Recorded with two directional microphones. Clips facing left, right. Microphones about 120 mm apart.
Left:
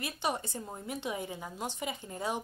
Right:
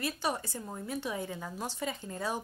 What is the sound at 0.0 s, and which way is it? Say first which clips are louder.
A woman's voice: right 1 dB; 20° left (ahead or behind).